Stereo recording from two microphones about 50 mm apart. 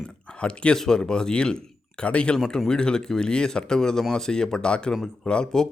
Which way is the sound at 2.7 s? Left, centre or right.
Centre.